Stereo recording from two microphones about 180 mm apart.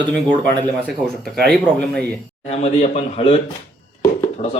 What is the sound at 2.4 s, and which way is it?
Speech, 35° left (ahead or behind).